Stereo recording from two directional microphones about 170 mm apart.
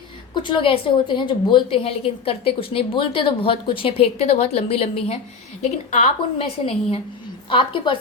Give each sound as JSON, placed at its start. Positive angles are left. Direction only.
{"t": 0.3, "sound": "a woman's voice", "side_deg": 30}